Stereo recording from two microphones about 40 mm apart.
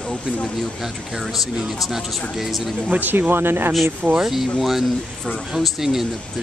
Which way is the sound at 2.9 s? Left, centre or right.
Right.